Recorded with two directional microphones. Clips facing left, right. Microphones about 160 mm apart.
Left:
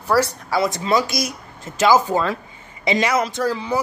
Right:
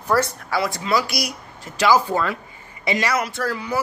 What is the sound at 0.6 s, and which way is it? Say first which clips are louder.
Speech: left 3 dB; 25° left (ahead or behind).